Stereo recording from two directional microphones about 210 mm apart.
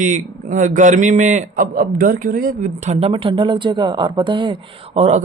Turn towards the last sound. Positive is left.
turn(degrees=-30)  # may be behind; listen again after turning